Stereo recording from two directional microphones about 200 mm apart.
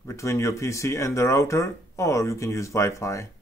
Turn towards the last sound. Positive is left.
turn(degrees=15)  # may be behind; listen again after turning